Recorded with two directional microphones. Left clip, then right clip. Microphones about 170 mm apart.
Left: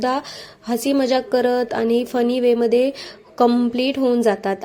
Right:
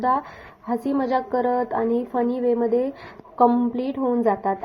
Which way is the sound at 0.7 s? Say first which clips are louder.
Left 4 dB; 20° left (ahead or behind).